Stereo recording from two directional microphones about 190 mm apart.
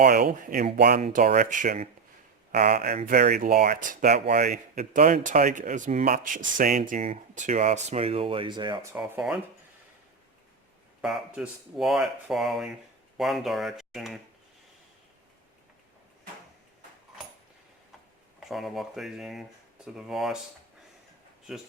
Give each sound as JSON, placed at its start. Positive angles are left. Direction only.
{"t": 0.0, "sound": "speech", "side_deg": -50}
{"t": 1.0, "sound": "speech", "side_deg": -40}
{"t": 11.0, "sound": "speech", "side_deg": -5}
{"t": 18.4, "sound": "speech", "side_deg": 0}
{"t": 21.5, "sound": "speech", "side_deg": 0}